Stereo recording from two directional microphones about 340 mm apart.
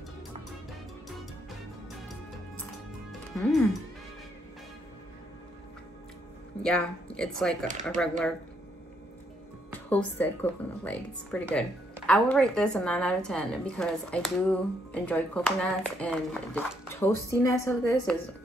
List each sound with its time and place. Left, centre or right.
3.1 s music: centre
6.6 s speech: centre
9.8 s speech: centre